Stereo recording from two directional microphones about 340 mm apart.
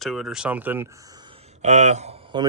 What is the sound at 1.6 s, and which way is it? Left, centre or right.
Speech, centre.